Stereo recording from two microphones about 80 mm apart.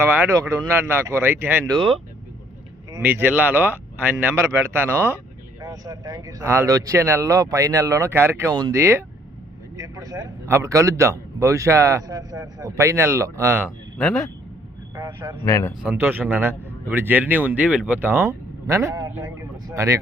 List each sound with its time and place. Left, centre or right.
0.0 s a man's voice: right
0.3 s a man's voice: right
3.0 s a man's voice: right
5.5 s a man's voice: right
8.1 s a man's voice: right
9.7 s speech: right
10.4 s a man's voice: right
14.0 s speech: centre
15.0 s a man's voice: right
15.4 s speech: left
15.9 s a man's voice: right
18.1 s a man's voice: right